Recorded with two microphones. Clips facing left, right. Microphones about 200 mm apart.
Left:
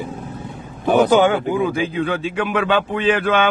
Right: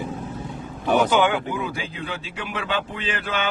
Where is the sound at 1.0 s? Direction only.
40° left (ahead or behind).